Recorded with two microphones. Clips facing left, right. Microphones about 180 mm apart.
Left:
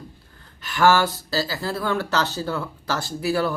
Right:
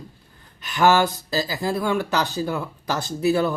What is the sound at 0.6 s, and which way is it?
Speech, 20° right (ahead or behind).